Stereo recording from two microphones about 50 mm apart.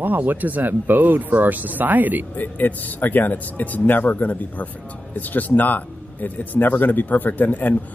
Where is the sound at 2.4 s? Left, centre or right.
Left.